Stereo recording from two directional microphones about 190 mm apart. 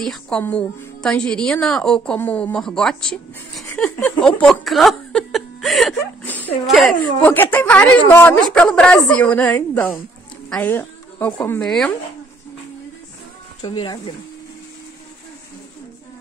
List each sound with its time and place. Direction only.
0.0 s a woman's voice: 5° left (ahead or behind)
13.6 s speech: 20° left (ahead or behind)